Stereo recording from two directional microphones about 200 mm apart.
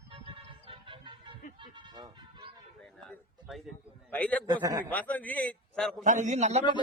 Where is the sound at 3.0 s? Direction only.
Centre (ahead or behind).